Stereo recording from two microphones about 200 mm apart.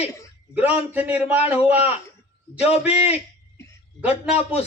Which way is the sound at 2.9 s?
30° left (ahead or behind).